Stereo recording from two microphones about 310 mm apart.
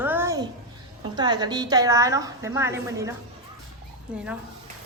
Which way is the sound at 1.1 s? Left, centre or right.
Centre.